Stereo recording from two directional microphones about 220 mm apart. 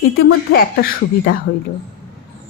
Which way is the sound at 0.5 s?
45° left (ahead or behind).